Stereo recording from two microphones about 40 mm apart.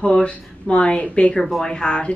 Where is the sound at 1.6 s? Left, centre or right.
Centre.